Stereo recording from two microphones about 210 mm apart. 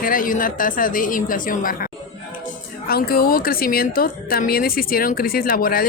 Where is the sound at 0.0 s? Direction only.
40° left (ahead or behind).